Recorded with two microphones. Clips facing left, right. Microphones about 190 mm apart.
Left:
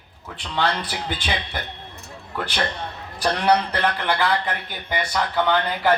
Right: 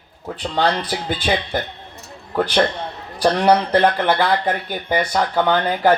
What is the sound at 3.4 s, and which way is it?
A man's voice, 45° right (ahead or behind).